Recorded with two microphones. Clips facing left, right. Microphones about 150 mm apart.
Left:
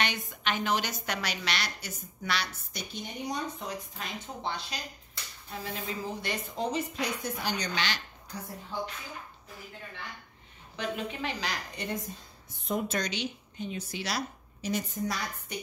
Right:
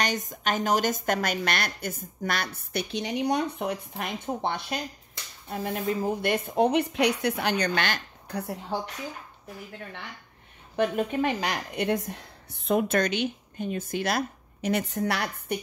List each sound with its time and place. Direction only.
0.0 s a woman's voice: 45° right (ahead or behind); by 8.7 s 65° right (ahead or behind)
10.8 s speech: 50° right (ahead or behind)